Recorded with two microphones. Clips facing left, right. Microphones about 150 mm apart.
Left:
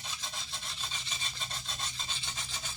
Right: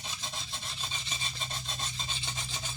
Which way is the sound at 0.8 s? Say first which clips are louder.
Right 3 dB; 20° right (ahead or behind).